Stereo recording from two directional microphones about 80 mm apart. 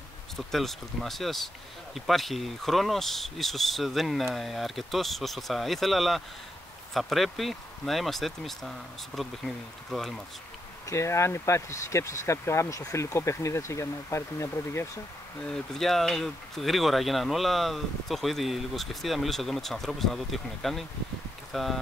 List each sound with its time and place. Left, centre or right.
0.4 s speech: centre
10.9 s speech: left
15.5 s speech: centre